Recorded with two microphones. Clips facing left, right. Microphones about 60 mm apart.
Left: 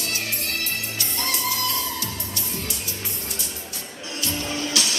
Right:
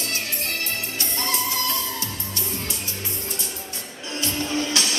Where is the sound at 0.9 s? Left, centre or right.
Right.